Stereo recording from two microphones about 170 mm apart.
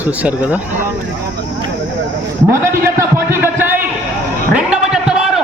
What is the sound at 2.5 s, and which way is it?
A man's voice, 15° right (ahead or behind).